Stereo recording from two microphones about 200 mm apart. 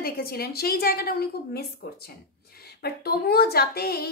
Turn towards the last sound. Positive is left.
turn(degrees=50)  # may be behind; listen again after turning